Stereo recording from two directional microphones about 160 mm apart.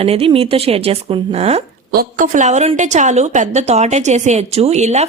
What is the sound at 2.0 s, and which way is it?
Speech, 55° right (ahead or behind).